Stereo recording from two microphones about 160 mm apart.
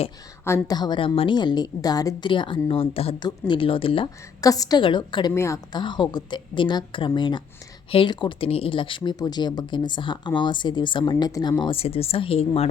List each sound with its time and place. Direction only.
0.4 s speech: 20° left (ahead or behind)
5.3 s a woman's voice: 15° left (ahead or behind)
5.7 s speech: 30° left (ahead or behind)
11.6 s speech: 35° left (ahead or behind)